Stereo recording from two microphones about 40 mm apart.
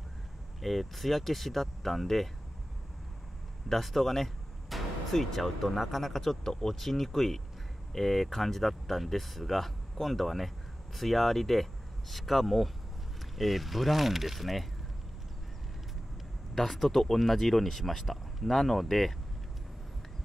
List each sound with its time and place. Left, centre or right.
0.6 s speech: centre
3.6 s speech: centre
16.5 s speech: centre